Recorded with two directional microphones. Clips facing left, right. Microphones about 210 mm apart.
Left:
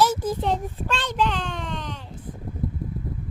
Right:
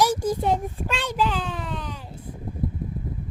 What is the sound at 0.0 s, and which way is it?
Child singing, 15° right (ahead or behind).